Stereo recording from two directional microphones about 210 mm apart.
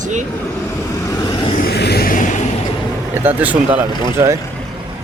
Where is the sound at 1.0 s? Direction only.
20° left (ahead or behind).